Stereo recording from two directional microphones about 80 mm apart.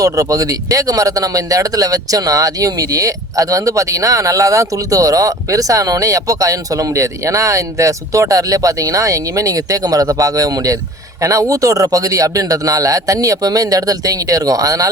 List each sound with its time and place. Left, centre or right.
0.0 s a man's voice: right